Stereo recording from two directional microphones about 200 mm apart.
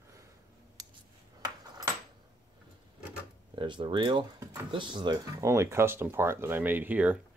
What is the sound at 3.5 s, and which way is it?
Speech, 25° right (ahead or behind).